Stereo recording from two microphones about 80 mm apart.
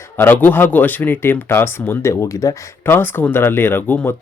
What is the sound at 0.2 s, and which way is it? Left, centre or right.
Speech, left.